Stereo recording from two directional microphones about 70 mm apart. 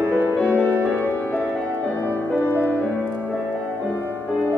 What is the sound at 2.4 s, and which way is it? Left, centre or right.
Music, left.